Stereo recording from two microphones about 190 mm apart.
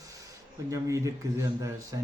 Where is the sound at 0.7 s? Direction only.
15° right (ahead or behind).